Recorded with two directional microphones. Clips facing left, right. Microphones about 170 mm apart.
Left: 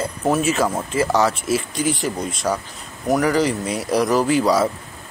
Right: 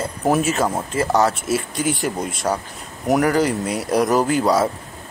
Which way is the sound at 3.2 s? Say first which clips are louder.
Left 1 dB; 50° right (ahead or behind).